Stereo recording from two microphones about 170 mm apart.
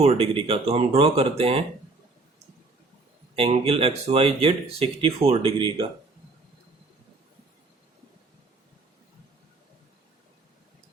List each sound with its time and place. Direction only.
0.0 s speech: 35° right (ahead or behind)
3.3 s speech: 35° right (ahead or behind)